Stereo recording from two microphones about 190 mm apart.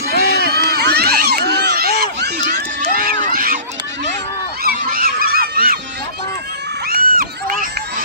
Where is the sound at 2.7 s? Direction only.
50° right (ahead or behind).